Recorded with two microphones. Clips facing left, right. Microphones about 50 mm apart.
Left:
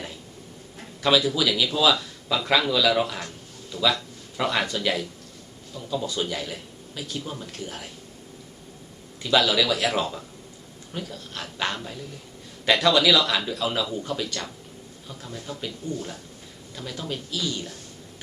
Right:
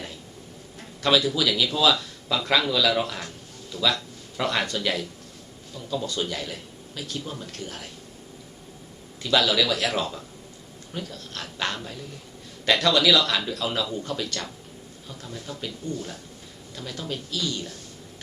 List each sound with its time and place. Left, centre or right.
0.8 s speech: centre
9.2 s speech: centre
16.7 s speech: centre